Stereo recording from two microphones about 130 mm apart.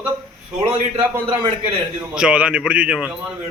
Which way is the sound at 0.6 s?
20° right (ahead or behind).